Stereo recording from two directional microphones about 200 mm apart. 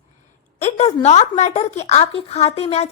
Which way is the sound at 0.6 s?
30° left (ahead or behind).